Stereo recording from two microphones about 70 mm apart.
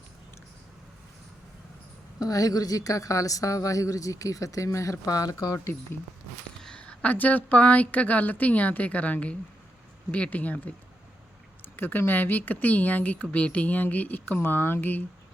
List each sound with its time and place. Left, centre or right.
2.1 s a woman's voice: left
6.6 s a woman's voice: centre